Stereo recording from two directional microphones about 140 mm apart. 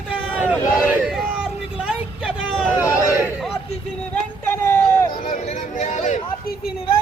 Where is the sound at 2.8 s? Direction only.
25° left (ahead or behind).